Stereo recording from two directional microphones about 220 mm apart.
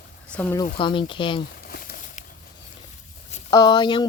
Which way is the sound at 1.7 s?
45° left (ahead or behind).